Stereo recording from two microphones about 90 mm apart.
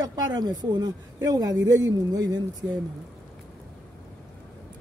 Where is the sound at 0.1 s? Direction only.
50° right (ahead or behind).